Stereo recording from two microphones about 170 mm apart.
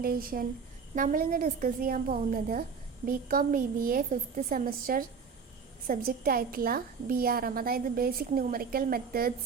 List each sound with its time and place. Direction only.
0.0 s a woman's voice: 60° right (ahead or behind)